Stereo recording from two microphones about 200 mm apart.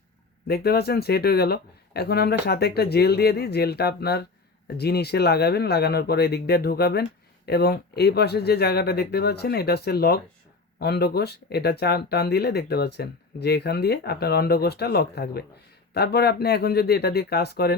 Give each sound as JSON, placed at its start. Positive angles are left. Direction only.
{"t": 0.4, "sound": "speech", "side_deg": 50}